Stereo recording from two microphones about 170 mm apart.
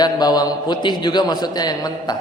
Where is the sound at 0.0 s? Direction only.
25° left (ahead or behind).